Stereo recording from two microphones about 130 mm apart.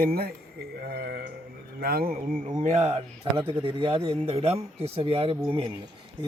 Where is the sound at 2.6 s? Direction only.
65° right (ahead or behind).